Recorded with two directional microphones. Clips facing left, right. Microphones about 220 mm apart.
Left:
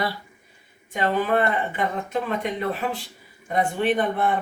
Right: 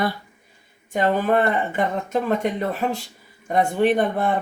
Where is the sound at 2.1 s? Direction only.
45° right (ahead or behind).